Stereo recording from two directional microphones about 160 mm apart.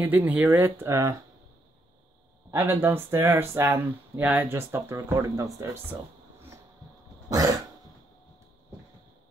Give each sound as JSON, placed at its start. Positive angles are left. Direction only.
{"t": 0.0, "sound": "speech", "side_deg": -10}
{"t": 2.5, "sound": "speech", "side_deg": -15}
{"t": 7.2, "sound": "throat clearing", "side_deg": -20}